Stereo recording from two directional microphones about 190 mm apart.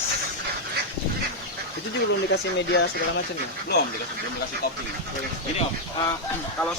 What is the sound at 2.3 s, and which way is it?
Speech, 65° left (ahead or behind).